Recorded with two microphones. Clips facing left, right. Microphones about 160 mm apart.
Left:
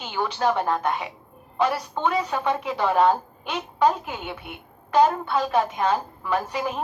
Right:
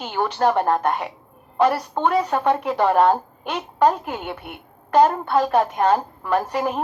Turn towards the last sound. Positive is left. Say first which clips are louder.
# right 4 dB
turn(degrees=-50)  # may be behind; listen again after turning